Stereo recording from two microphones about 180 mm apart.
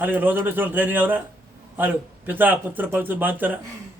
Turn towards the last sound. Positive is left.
turn(degrees=-10)  # may be behind; listen again after turning